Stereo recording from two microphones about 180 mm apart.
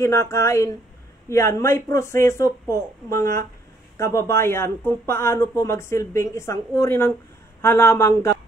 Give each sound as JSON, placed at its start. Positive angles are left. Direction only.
{"t": 0.0, "sound": "speech", "side_deg": 15}